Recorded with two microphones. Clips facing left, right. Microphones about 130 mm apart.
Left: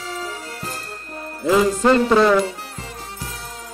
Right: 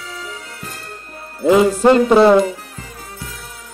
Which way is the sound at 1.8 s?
20° right (ahead or behind).